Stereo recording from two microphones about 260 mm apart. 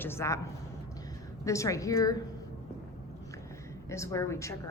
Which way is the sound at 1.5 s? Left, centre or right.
Centre.